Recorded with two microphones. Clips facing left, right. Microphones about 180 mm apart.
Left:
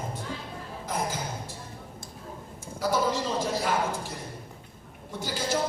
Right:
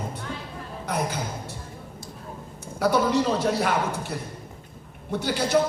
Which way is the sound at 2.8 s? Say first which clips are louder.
Right 5 dB; 65° right (ahead or behind).